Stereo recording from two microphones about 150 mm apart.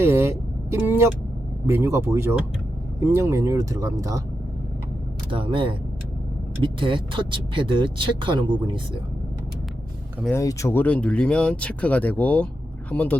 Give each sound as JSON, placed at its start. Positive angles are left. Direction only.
{"t": 0.0, "sound": "speech", "side_deg": -15}
{"t": 5.3, "sound": "speech", "side_deg": -35}
{"t": 10.3, "sound": "speech", "side_deg": 20}